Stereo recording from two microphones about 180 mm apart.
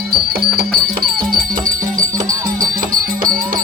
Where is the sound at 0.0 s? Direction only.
60° right (ahead or behind).